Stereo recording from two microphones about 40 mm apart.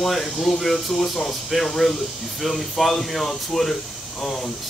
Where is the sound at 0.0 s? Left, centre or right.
Centre.